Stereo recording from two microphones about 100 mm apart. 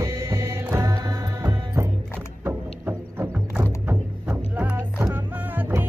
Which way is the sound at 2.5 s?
20° right (ahead or behind).